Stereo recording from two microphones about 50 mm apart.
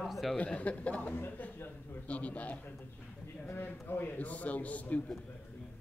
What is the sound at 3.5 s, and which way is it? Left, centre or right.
A man's voice, left.